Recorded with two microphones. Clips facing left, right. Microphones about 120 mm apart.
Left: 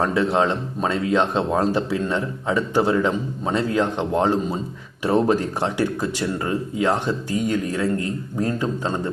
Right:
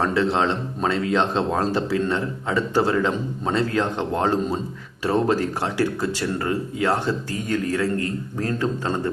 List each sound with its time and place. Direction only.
0.1 s speech: 15° left (ahead or behind)